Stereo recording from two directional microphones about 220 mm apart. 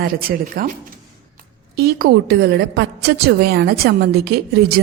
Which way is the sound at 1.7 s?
45° right (ahead or behind).